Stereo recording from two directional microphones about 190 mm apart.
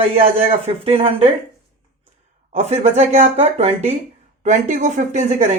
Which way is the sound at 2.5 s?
35° right (ahead or behind).